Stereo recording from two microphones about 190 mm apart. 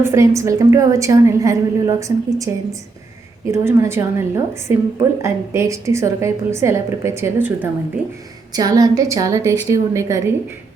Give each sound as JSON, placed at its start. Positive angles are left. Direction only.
{"t": 0.0, "sound": "a woman's voice", "side_deg": -15}
{"t": 3.5, "sound": "a woman's voice", "side_deg": -15}